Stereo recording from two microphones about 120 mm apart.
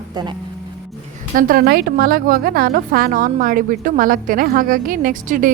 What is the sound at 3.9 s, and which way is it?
Speech, 90° right.